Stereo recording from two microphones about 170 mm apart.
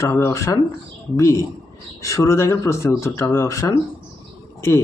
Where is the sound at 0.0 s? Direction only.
15° left (ahead or behind).